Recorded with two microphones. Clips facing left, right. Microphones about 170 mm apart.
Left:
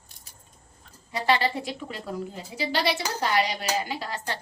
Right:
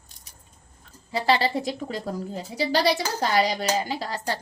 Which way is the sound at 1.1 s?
35° right (ahead or behind).